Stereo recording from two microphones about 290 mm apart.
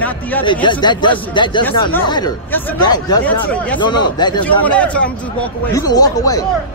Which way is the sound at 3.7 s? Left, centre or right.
Centre.